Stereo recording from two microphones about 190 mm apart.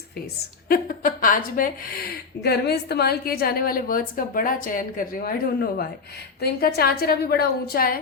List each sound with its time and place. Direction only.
0.7 s a woman's voice: 45° left (ahead or behind)